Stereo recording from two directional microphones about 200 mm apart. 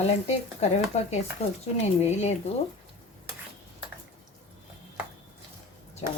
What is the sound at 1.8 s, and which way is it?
Speech, 35° left (ahead or behind).